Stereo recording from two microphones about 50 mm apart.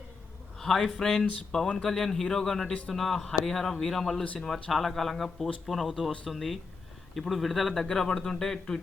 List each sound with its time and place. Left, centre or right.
0.6 s a man's voice: centre